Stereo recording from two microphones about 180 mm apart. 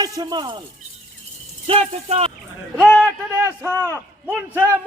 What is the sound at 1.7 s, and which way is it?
Speech, 35° right (ahead or behind).